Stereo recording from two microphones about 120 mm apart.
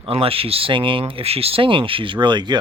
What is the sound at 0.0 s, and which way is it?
Speech, 50° right (ahead or behind).